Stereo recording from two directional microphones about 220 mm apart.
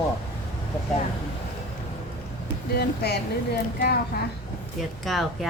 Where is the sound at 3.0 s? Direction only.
50° left (ahead or behind).